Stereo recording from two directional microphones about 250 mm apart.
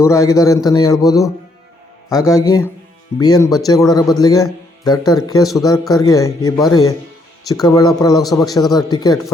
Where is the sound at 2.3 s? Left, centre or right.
Centre.